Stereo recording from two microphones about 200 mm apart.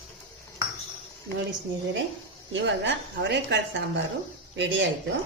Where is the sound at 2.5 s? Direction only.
65° right (ahead or behind).